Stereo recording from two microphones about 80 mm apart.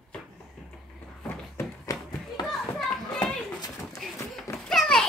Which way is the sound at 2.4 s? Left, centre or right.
Left.